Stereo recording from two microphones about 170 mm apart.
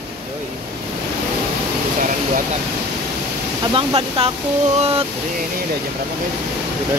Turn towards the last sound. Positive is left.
turn(degrees=-35)  # may be behind; listen again after turning